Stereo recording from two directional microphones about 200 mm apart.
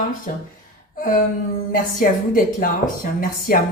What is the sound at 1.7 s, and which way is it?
Speech, 45° left (ahead or behind).